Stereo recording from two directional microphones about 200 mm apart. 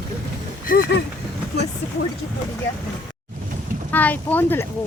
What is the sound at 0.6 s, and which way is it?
Speech, 50° left (ahead or behind).